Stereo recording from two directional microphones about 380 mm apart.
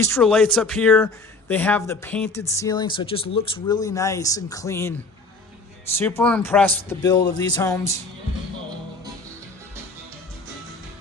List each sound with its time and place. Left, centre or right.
0.0 s speech: centre
6.0 s speech: centre